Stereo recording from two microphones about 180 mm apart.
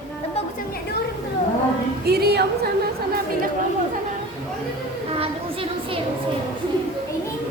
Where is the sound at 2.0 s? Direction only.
60° right (ahead or behind).